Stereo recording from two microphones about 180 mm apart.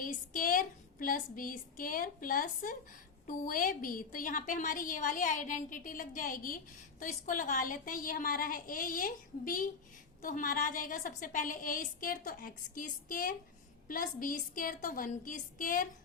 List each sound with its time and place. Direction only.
0.0 s a woman's voice: 50° left (ahead or behind)